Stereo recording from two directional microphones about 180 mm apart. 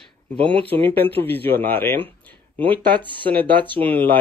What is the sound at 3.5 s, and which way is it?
Speech, 10° left (ahead or behind).